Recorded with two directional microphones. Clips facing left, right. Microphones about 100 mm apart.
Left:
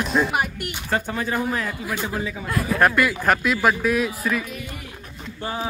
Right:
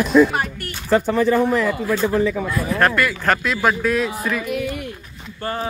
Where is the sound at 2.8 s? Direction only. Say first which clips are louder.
Even; 10° left (ahead or behind).